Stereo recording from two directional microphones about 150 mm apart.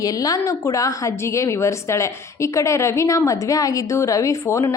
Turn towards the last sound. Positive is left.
turn(degrees=20)  # may be behind; listen again after turning